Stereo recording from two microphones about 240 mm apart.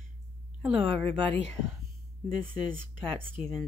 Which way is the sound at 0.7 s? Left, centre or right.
Right.